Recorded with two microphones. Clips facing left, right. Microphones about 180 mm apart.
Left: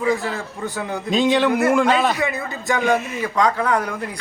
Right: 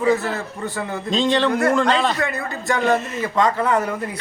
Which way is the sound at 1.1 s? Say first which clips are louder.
Left 2 dB; 15° left (ahead or behind).